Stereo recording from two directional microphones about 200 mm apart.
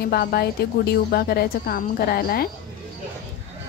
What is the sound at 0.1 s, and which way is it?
A woman's voice, 50° left (ahead or behind).